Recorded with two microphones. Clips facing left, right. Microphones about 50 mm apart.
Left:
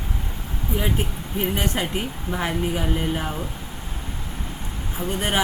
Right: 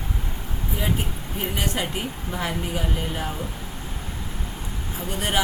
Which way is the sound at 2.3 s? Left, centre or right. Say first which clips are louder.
Left 4 dB; centre.